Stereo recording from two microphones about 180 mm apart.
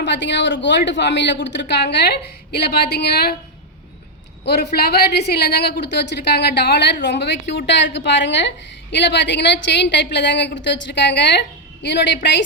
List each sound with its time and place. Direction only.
0.0 s a woman's voice: 80° left
4.4 s a woman's voice: 65° left (ahead or behind)